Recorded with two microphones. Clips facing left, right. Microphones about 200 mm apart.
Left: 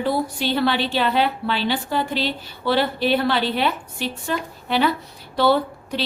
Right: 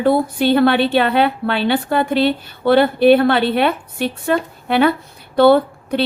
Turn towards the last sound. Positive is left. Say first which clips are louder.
# right 7 dB
turn(degrees=-55)  # may be behind; listen again after turning